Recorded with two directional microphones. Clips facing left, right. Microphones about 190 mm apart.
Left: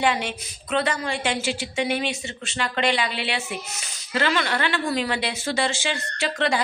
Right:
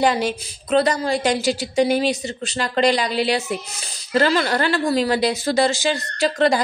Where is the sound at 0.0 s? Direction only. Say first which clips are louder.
Right 5 dB; 35° right (ahead or behind).